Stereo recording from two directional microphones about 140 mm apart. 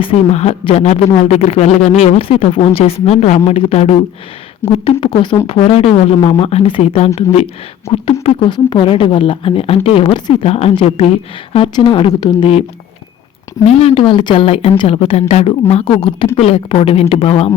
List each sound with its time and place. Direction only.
0.0 s speech: 45° left (ahead or behind)
8.2 s speech: 35° left (ahead or behind)
13.7 s speech: 45° left (ahead or behind)